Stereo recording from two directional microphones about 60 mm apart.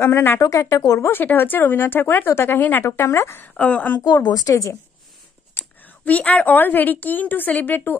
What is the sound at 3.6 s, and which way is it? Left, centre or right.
Speech, left.